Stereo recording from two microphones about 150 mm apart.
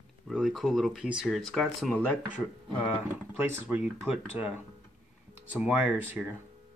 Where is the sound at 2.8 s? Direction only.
10° right (ahead or behind).